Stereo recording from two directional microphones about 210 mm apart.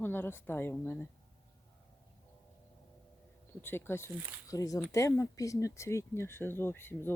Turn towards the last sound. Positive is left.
turn(degrees=10)  # may be behind; listen again after turning